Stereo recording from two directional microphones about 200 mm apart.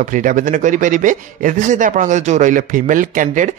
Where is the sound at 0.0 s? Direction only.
40° right (ahead or behind).